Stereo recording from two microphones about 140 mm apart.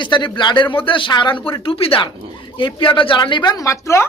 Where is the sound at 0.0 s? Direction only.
35° left (ahead or behind).